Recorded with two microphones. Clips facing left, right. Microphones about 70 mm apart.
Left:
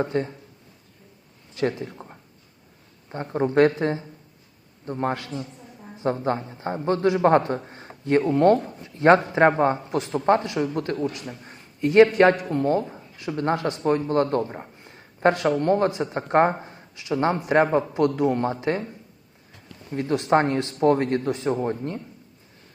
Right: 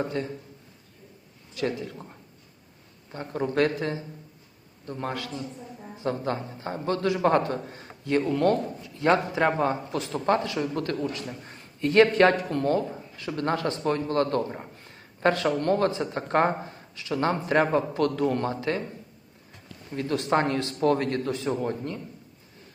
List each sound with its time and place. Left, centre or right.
0.0 s a man's voice: left
1.5 s a man's voice: left
11.3 s a man's voice: centre; by 18.8 s left
19.9 s a man's voice: left